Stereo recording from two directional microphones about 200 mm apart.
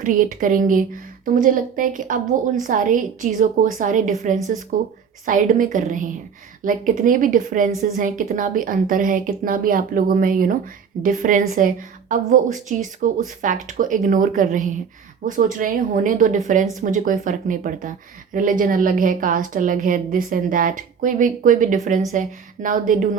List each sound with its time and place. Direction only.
0.0 s a woman's voice: 40° right (ahead or behind)